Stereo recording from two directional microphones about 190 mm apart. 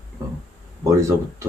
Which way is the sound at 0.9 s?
15° right (ahead or behind).